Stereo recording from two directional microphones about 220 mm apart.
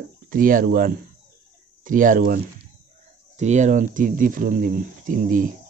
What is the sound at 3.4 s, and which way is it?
Speech, 30° right (ahead or behind).